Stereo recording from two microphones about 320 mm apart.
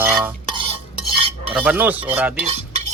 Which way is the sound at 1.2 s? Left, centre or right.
Centre.